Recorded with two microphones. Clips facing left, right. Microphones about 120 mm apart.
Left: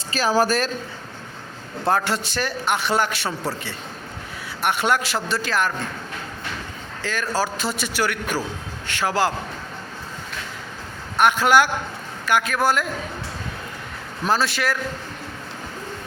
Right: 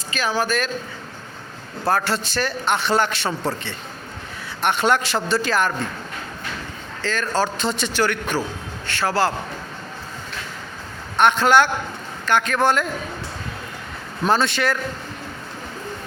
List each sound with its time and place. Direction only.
0.1 s speech: 35° left (ahead or behind)
1.9 s a man's voice: 15° left (ahead or behind)
7.0 s a man's voice: 10° left (ahead or behind)
11.2 s a man's voice: 10° left (ahead or behind)
14.3 s speech: 5° left (ahead or behind)